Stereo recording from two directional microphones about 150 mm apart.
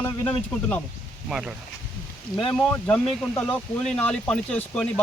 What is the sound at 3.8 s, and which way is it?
Speech, 10° left (ahead or behind).